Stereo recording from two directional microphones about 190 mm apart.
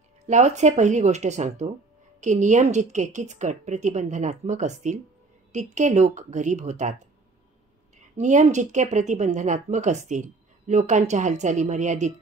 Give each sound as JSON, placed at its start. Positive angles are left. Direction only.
{"t": 0.3, "sound": "speech", "side_deg": -40}
{"t": 8.2, "sound": "speech", "side_deg": -40}